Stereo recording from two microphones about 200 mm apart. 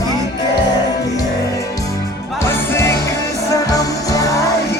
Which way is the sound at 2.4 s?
10° left (ahead or behind).